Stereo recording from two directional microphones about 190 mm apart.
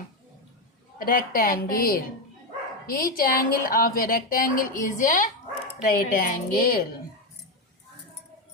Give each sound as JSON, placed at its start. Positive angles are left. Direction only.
{"t": 0.9, "sound": "a woman's voice", "side_deg": 45}